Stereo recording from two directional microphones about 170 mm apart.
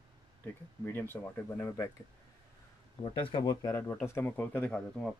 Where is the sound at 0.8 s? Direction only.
10° left (ahead or behind).